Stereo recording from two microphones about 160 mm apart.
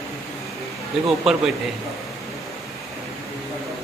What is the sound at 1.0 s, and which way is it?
Speech, centre (ahead or behind).